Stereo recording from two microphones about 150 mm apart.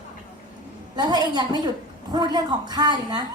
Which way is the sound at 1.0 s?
25° right (ahead or behind).